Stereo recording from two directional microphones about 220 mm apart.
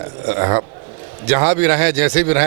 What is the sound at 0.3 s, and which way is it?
A man's voice, 20° right (ahead or behind).